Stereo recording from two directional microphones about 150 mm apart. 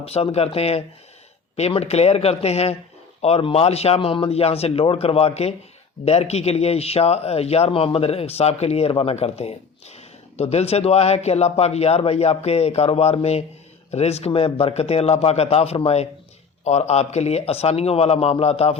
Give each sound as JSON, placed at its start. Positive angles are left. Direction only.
{"t": 0.0, "sound": "a man's voice", "side_deg": 45}